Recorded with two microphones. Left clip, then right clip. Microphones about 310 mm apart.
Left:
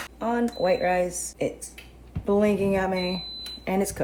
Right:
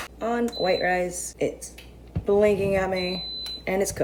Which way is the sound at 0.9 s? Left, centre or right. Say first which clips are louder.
Left 1 dB; centre.